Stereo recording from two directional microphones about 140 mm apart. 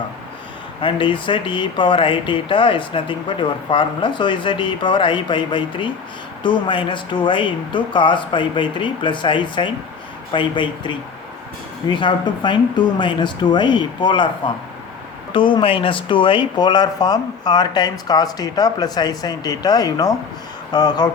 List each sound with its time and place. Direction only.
0.8 s speech: 35° left (ahead or behind)
15.3 s speech: 35° left (ahead or behind)